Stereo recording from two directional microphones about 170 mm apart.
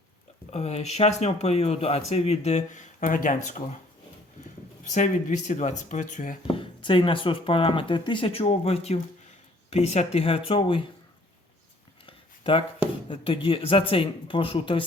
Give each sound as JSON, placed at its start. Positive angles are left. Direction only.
{"t": 0.5, "sound": "speech", "side_deg": 40}
{"t": 4.9, "sound": "speech", "side_deg": 45}
{"t": 6.5, "sound": "speech", "side_deg": 30}
{"t": 12.0, "sound": "a sound", "side_deg": 30}
{"t": 13.1, "sound": "speech", "side_deg": 30}